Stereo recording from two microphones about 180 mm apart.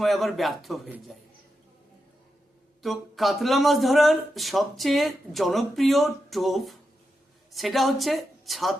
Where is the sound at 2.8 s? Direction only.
Centre (ahead or behind).